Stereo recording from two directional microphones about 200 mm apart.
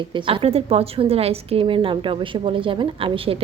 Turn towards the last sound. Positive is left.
turn(degrees=-25)  # may be behind; listen again after turning